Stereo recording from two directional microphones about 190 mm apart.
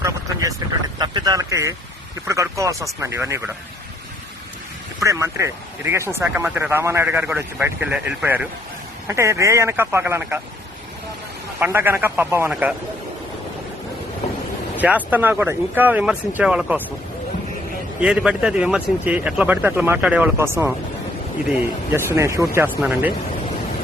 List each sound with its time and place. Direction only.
0.0 s a sound: 15° right (ahead or behind)
2.2 s speech: 15° right (ahead or behind)
4.9 s speech: 15° right (ahead or behind)
11.6 s speech: 10° right (ahead or behind)
14.8 s speech: 10° right (ahead or behind)
18.0 s speech: 5° right (ahead or behind)
21.9 s speech: 15° right (ahead or behind)